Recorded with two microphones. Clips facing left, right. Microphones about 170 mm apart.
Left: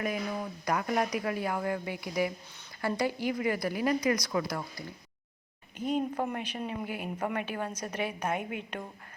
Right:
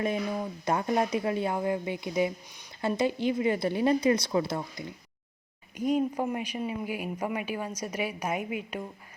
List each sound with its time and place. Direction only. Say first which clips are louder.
0.0 s speech: right 3 dB; 25° right (ahead or behind)
5.7 s speech: right 4 dB; 10° right (ahead or behind)